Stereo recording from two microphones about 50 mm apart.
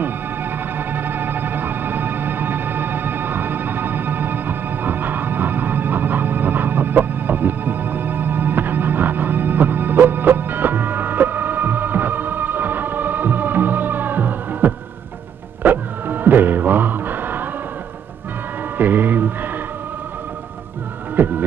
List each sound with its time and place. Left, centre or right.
0.0 s music: right
18.8 s music: right
21.2 s heart murmur: right